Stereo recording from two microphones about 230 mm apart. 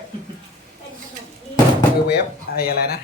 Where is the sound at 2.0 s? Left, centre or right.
Left.